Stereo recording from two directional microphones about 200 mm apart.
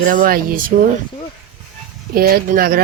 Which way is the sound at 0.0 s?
45° right (ahead or behind).